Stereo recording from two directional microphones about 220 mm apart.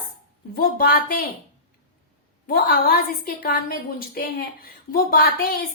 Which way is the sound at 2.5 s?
40° left (ahead or behind).